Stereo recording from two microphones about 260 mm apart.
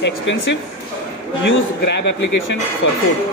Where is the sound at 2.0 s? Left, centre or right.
Left.